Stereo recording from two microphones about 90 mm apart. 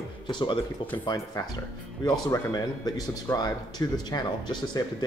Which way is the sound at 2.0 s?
45° left (ahead or behind).